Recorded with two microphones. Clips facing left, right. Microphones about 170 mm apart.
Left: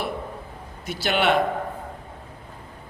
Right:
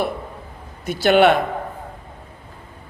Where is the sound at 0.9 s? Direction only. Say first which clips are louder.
Right 9 dB; 50° right (ahead or behind).